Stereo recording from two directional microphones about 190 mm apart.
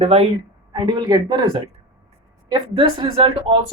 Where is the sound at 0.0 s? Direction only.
30° right (ahead or behind).